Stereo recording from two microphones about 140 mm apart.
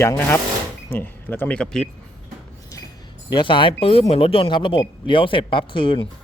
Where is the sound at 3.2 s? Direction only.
35° left (ahead or behind).